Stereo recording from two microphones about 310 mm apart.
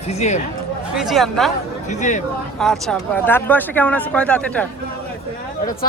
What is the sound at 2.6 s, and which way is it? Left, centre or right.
Speech, centre.